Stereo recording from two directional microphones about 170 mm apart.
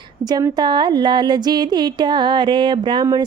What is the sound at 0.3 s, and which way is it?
Speech, 25° right (ahead or behind).